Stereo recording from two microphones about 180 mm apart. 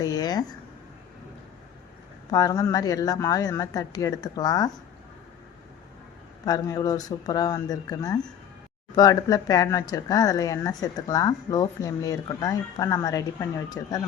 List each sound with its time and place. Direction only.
0.0 s speech: 20° left (ahead or behind)
2.3 s speech: 20° left (ahead or behind)
6.4 s speech: 20° left (ahead or behind)